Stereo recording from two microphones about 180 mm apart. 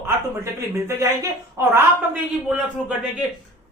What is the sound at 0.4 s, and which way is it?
A woman's voice, 15° right (ahead or behind).